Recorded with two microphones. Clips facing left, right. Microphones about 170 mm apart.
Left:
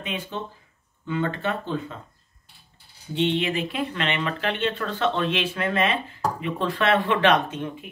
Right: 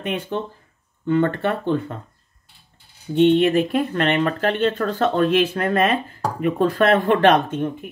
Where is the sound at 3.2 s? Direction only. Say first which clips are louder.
Right 9 dB; 50° right (ahead or behind).